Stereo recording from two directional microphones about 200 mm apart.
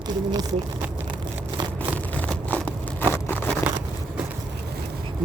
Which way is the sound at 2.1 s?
5° left (ahead or behind).